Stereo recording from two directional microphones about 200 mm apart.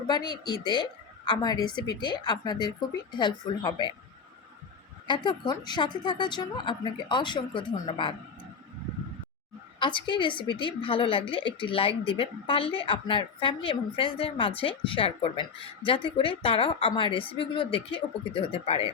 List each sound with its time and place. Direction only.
0.1 s a woman's voice: 20° left (ahead or behind)
5.0 s a woman's voice: 25° left (ahead or behind)
9.8 s a woman's voice: 25° left (ahead or behind)